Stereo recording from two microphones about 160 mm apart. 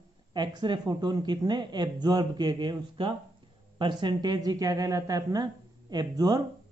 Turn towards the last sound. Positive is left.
turn(degrees=-25)  # may be behind; listen again after turning